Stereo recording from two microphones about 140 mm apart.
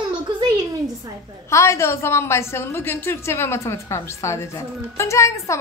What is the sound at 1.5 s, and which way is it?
A woman's voice, 20° left (ahead or behind).